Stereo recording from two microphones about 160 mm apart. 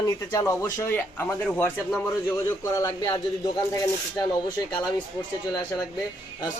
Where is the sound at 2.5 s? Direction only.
20° left (ahead or behind).